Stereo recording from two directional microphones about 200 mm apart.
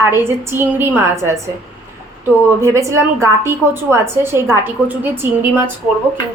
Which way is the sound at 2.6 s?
15° right (ahead or behind).